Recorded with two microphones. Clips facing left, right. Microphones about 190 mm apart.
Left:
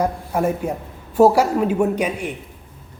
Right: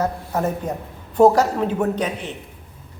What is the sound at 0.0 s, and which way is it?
Speech, 10° left (ahead or behind).